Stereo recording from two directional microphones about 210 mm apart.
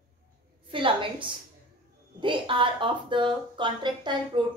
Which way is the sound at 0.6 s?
25° right (ahead or behind).